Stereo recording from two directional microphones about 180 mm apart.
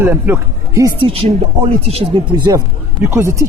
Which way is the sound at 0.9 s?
30° right (ahead or behind).